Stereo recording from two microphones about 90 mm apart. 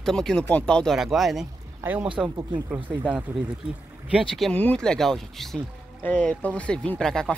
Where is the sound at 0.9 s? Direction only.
Centre (ahead or behind).